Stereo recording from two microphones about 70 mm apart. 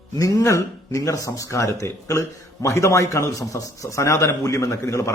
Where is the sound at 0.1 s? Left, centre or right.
Left.